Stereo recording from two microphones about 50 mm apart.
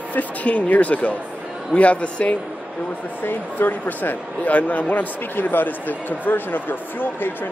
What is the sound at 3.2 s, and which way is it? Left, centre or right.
Speech, left.